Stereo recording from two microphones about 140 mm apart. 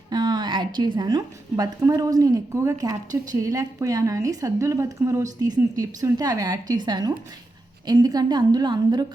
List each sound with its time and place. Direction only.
0.1 s a woman's voice: 30° right (ahead or behind)